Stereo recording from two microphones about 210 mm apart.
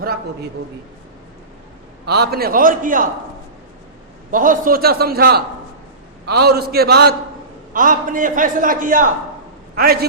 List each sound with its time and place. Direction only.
2.0 s a man's voice: 50° right (ahead or behind)
4.3 s a man's voice: 40° right (ahead or behind)